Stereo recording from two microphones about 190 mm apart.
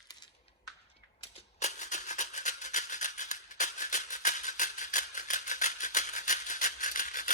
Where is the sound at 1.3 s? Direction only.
35° left (ahead or behind).